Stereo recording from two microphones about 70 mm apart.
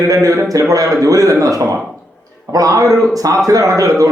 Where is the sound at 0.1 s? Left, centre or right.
Right.